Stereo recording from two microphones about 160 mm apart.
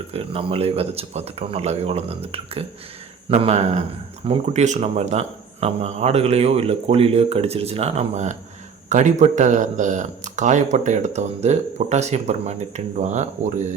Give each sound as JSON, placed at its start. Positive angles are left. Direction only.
{"t": 0.1, "sound": "speech", "side_deg": -35}